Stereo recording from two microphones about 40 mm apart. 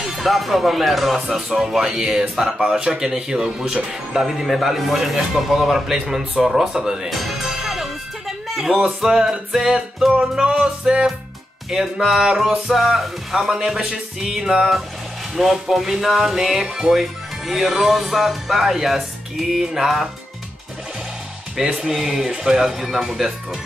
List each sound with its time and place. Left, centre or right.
0.0 s speech: centre
7.1 s speech: centre
7.4 s music: centre
8.8 s speech: centre
21.7 s speech: centre